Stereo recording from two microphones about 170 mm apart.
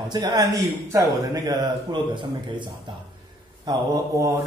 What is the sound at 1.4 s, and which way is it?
Speech, 25° right (ahead or behind).